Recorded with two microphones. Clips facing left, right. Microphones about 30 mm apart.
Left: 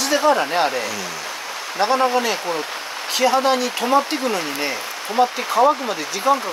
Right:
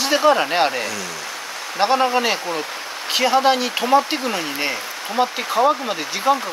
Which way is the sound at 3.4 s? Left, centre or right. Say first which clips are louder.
Right 1 dB; right.